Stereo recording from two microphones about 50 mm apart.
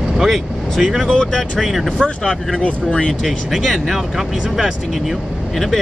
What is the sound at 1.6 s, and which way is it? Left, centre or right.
Speech, centre.